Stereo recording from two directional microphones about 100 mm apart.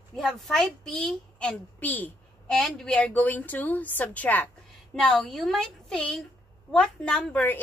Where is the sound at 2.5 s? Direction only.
5° left (ahead or behind).